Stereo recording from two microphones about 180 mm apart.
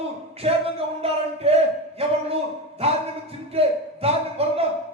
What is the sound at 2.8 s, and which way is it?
Speech, 35° right (ahead or behind).